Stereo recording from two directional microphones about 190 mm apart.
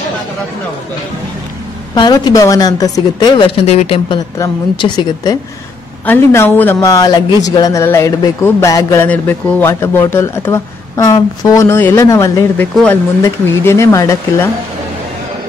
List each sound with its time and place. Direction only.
2.0 s a woman's voice: 20° left (ahead or behind)
6.0 s speech: 10° left (ahead or behind)